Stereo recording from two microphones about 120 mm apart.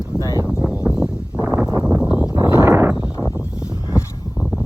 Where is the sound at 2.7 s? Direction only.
20° right (ahead or behind).